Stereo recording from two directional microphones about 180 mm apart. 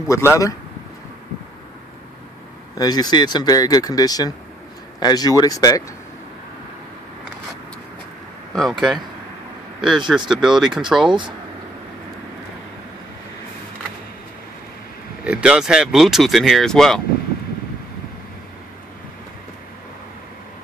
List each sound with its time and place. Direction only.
0.1 s speech: 15° left (ahead or behind)
2.8 s speech: 20° left (ahead or behind)
8.5 s speech: centre (ahead or behind)
11.1 s speech: 25° right (ahead or behind)
15.2 s speech: 5° right (ahead or behind)